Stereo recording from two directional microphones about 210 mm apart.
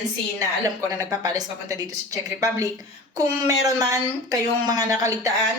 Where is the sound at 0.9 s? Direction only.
15° right (ahead or behind).